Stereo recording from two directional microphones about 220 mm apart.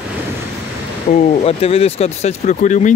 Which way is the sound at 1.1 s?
25° left (ahead or behind).